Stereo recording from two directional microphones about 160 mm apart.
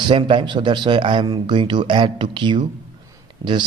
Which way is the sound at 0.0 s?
30° right (ahead or behind).